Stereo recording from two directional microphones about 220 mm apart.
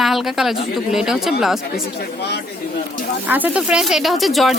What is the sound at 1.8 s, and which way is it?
Speech, 50° left (ahead or behind).